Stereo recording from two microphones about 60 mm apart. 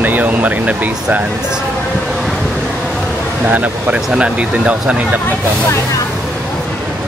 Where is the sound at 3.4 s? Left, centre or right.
Right.